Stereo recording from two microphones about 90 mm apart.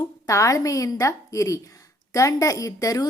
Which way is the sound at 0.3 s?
35° left (ahead or behind).